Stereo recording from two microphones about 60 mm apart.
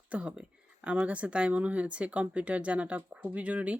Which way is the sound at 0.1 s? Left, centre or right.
Right.